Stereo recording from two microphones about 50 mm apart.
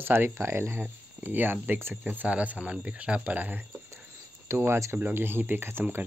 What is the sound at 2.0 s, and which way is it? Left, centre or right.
Speech, right.